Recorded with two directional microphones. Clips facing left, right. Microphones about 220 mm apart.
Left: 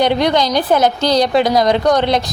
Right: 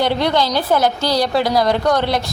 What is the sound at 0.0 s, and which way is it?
A woman's voice, 15° left (ahead or behind).